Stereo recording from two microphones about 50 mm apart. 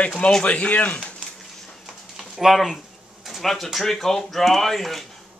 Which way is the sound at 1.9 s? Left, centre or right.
Centre.